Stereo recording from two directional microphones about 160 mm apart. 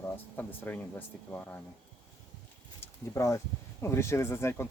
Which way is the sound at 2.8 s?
20° left (ahead or behind).